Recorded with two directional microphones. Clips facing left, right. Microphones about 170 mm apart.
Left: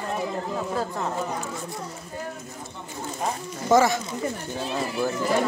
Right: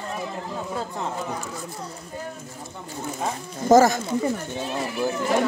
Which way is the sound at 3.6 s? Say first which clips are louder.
Right 4 dB; 40° right (ahead or behind).